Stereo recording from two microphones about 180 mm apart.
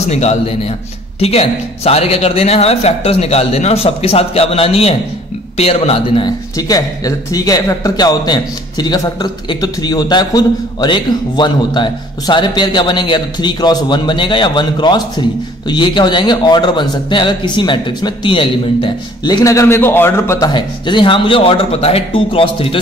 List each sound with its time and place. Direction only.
0.1 s a man's voice: 35° left (ahead or behind)